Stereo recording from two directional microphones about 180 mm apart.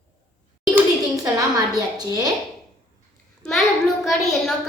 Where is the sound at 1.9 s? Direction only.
20° right (ahead or behind).